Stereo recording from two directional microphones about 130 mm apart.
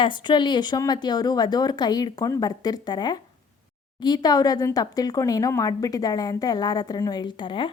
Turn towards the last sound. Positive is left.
turn(degrees=40)  # may be behind; listen again after turning